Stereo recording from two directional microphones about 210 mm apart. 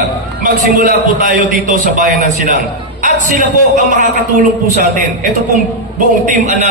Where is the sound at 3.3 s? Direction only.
35° right (ahead or behind).